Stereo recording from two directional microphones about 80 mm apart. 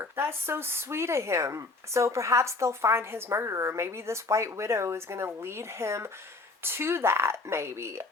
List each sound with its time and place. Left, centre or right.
0.0 s speech: right